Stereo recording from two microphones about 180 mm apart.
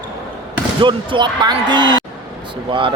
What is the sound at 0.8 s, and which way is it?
A man's voice, 25° right (ahead or behind).